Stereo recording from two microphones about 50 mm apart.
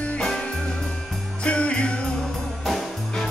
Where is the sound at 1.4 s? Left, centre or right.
Left.